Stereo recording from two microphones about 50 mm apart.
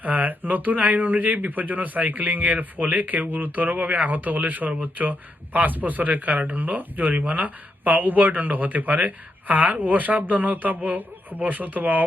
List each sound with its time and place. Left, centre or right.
0.0 s speech: right